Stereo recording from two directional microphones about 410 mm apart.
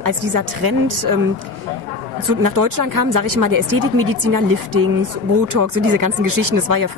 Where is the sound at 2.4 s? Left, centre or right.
Right.